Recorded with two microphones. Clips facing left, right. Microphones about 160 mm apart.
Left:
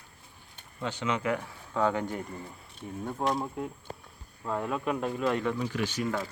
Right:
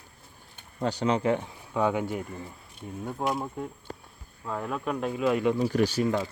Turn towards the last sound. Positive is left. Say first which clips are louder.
# right 6 dB
turn(degrees=-35)  # may be behind; listen again after turning